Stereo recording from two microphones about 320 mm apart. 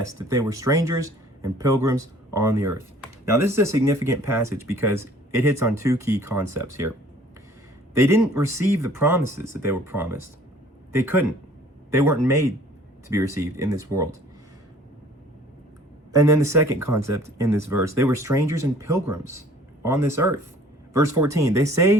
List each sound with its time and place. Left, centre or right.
0.3 s speech: centre
7.9 s speech: centre
16.1 s speech: centre